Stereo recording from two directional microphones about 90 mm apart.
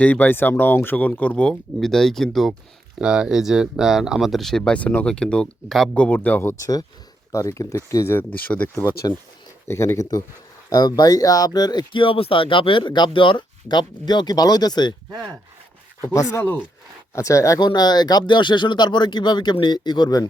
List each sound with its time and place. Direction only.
0.0 s speech: 15° left (ahead or behind)
3.0 s speech: 10° right (ahead or behind)
5.9 s speech: 15° left (ahead or behind)
7.3 s speech: 40° left (ahead or behind)
8.3 s speech: 15° left (ahead or behind)
9.1 s speech: 40° left (ahead or behind)
9.6 s speech: 30° left (ahead or behind)
10.7 s speech: 50° left (ahead or behind)
16.0 s speech: 35° left (ahead or behind)
17.6 s speech: 50° left (ahead or behind)